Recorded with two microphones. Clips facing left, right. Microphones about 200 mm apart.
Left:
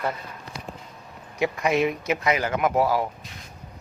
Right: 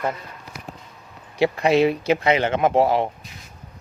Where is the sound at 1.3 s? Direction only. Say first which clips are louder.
Right 5 dB; 30° right (ahead or behind).